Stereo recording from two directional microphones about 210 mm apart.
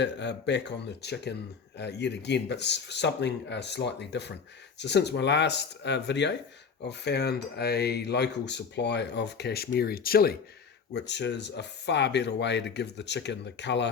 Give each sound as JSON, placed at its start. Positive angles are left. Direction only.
{"t": 0.0, "sound": "speech", "side_deg": 55}